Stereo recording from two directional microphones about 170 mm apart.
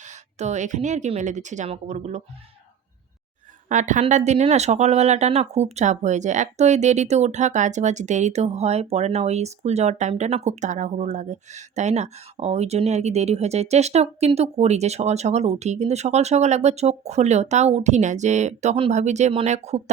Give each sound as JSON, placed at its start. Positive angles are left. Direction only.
{"t": 0.0, "sound": "a woman's voice", "side_deg": -40}
{"t": 3.7, "sound": "a woman's voice", "side_deg": -45}